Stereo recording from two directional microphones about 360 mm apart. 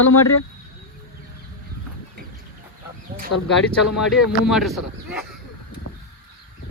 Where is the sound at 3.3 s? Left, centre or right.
Left.